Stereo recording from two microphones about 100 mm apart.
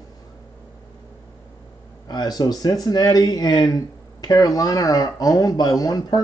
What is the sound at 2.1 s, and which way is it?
Speech, 40° left (ahead or behind).